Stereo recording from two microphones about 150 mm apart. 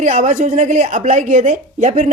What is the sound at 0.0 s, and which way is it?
A woman's voice, 55° right (ahead or behind).